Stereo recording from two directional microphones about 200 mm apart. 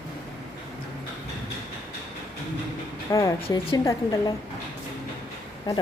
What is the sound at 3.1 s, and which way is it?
A woman's voice, 20° left (ahead or behind).